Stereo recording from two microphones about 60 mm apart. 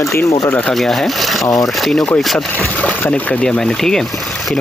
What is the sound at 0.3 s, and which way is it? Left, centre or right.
Speech, left.